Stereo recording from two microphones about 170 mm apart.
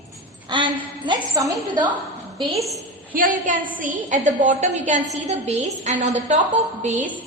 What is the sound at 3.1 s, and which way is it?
A woman's voice, 55° right (ahead or behind).